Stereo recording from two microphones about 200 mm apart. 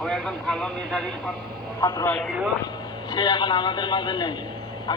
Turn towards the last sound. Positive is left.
turn(degrees=20)  # may be behind; listen again after turning